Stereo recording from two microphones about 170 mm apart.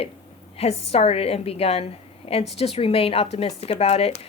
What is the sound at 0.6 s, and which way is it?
Speech, 35° left (ahead or behind).